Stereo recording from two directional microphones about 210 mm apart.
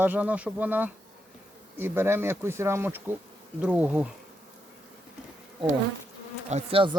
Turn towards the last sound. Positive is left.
turn(degrees=-25)  # may be behind; listen again after turning